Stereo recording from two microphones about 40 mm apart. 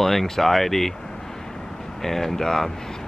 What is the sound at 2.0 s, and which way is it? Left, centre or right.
Speech, centre.